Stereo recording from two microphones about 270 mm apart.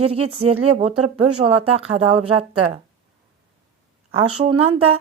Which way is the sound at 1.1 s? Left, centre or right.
Right.